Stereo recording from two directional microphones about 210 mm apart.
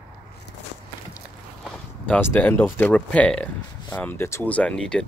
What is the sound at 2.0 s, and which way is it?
Speech, 5° left (ahead or behind).